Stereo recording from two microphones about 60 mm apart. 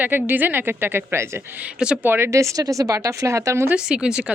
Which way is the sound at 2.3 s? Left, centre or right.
Right.